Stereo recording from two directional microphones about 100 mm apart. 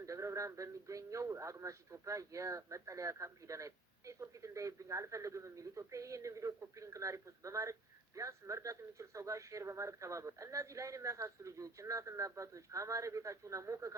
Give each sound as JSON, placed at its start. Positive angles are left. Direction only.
{"t": 0.0, "sound": "a man's voice", "side_deg": -30}